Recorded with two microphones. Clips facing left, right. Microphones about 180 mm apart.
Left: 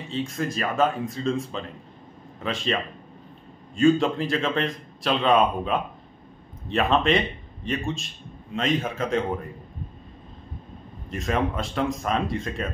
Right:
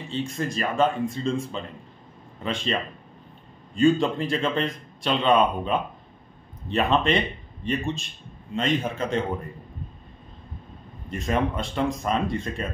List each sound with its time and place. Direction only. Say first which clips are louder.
0.1 s speech: even; centre (ahead or behind)
11.1 s speech: even; centre (ahead or behind)